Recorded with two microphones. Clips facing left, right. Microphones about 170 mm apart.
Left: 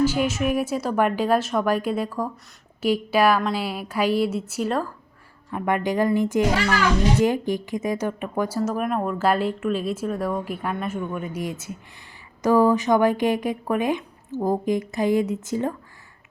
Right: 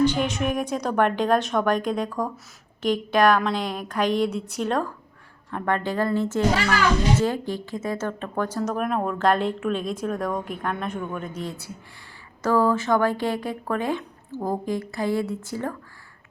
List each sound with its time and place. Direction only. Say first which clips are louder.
0.0 s speech: left 1 dB; 5° left (ahead or behind)